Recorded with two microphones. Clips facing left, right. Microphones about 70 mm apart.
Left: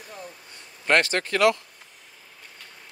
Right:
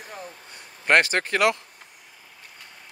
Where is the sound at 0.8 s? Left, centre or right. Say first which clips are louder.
Right 2 dB; right.